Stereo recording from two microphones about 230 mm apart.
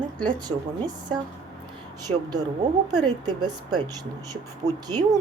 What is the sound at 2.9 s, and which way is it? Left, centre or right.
Speech, centre.